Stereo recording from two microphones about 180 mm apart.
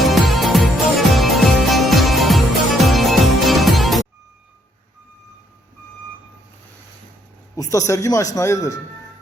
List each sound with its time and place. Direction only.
0.0 s music: centre (ahead or behind)
7.5 s speech: 20° left (ahead or behind)